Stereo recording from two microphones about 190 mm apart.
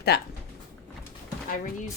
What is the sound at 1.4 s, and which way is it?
Speech, 50° left (ahead or behind).